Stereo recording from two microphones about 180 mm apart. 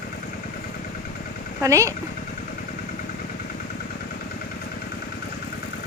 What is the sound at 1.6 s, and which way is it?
Speech, 15° right (ahead or behind).